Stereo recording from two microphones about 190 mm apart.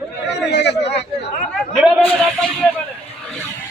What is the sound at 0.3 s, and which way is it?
Chatter, 65° left (ahead or behind).